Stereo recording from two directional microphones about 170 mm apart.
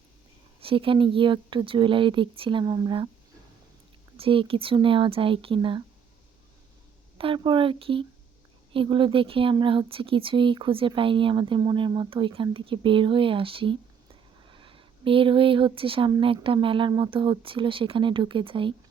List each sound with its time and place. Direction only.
0.6 s speech: 30° right (ahead or behind)
4.2 s speech: 30° right (ahead or behind)
7.2 s speech: 30° right (ahead or behind)